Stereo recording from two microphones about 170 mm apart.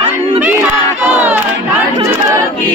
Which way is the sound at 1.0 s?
10° right (ahead or behind).